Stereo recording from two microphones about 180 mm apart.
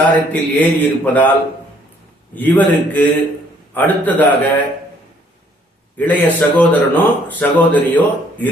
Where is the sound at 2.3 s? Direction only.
10° left (ahead or behind).